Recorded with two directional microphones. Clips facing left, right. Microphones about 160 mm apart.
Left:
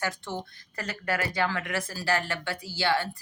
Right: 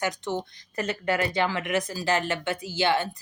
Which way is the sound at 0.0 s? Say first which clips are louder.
Right 4 dB; 20° right (ahead or behind).